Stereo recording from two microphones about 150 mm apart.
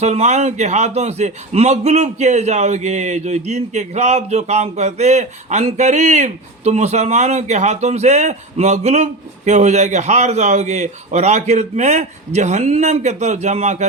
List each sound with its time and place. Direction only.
0.0 s a man's voice: 50° right (ahead or behind)